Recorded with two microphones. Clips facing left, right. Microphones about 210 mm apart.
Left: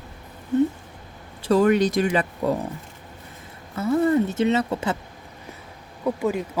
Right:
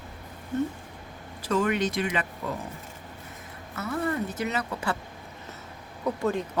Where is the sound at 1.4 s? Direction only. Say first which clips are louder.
Left 8 dB; 35° left (ahead or behind).